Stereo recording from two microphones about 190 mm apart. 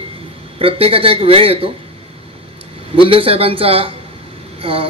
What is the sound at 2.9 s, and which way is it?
Speech, 30° right (ahead or behind).